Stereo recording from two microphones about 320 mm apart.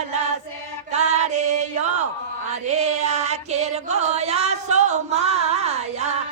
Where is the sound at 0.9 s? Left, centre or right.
Right.